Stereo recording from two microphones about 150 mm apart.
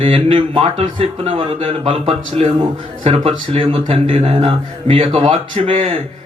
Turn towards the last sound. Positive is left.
turn(degrees=-40)  # may be behind; listen again after turning